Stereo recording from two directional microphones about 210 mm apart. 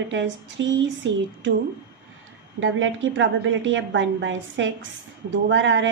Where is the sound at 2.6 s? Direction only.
65° right (ahead or behind).